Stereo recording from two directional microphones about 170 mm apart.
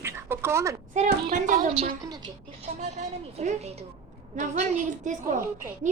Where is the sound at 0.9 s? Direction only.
45° right (ahead or behind).